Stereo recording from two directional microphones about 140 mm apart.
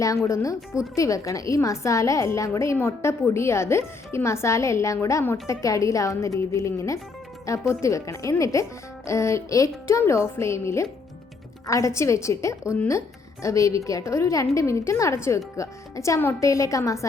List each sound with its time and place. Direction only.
0.0 s a woman's voice: 20° left (ahead or behind)